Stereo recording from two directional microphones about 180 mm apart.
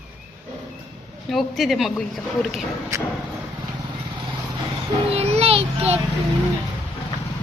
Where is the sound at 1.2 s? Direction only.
Centre (ahead or behind).